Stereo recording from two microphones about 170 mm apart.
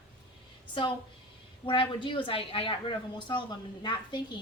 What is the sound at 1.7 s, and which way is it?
A woman's voice, 30° left (ahead or behind).